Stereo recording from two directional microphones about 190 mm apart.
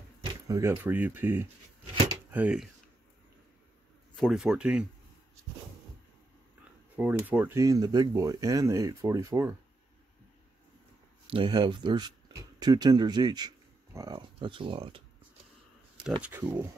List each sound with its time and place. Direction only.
0.2 s speech: 15° right (ahead or behind)
4.1 s speech: centre (ahead or behind)
7.0 s speech: 10° right (ahead or behind)
11.2 s speech: 25° right (ahead or behind)
16.0 s speech: 10° right (ahead or behind)